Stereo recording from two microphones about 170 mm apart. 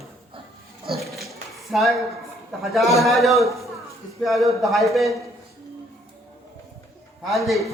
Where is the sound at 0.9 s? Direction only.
Centre (ahead or behind).